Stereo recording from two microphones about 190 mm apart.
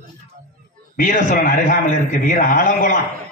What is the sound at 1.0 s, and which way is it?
A man's voice, 45° left (ahead or behind).